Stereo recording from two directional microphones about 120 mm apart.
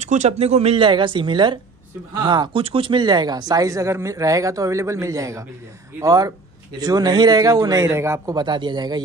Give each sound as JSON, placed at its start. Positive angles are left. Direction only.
{"t": 0.0, "sound": "speech", "side_deg": -80}
{"t": 8.4, "sound": "speech", "side_deg": -40}